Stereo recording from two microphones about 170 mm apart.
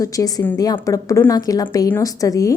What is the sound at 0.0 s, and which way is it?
A woman's voice, 20° left (ahead or behind).